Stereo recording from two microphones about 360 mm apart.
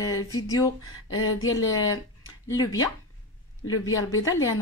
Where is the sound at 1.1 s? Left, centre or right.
Left.